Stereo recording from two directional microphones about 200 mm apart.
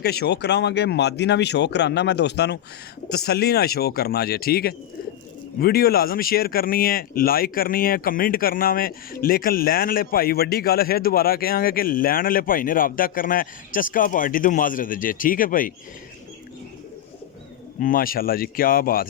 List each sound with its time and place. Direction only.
0.0 s speech: 55° left (ahead or behind)
17.7 s speech: 45° left (ahead or behind)